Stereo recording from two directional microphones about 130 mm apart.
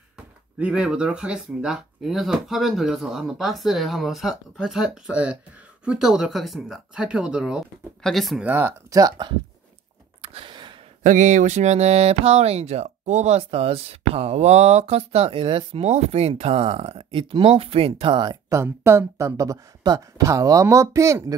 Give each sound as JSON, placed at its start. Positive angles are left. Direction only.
{"t": 0.6, "sound": "speech", "side_deg": -5}
{"t": 8.5, "sound": "speech", "side_deg": -15}
{"t": 8.9, "sound": "speech", "side_deg": -30}
{"t": 10.2, "sound": "gasp", "side_deg": -45}
{"t": 11.0, "sound": "speech", "side_deg": -80}
{"t": 13.4, "sound": "speech", "side_deg": -50}
{"t": 18.5, "sound": "speech", "side_deg": -20}